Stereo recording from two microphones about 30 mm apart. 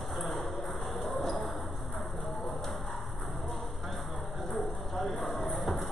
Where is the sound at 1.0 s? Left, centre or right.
Centre.